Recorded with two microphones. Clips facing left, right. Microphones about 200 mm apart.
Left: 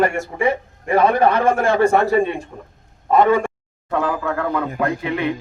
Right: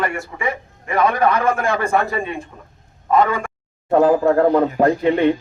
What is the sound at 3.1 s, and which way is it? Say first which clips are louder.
Speech: left 2 dB; 25° left (ahead or behind).